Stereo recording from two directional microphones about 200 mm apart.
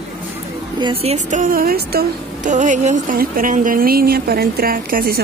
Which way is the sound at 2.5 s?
35° right (ahead or behind).